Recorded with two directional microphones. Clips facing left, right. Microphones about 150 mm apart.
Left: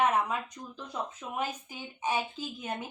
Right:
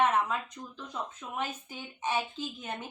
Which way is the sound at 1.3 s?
10° left (ahead or behind).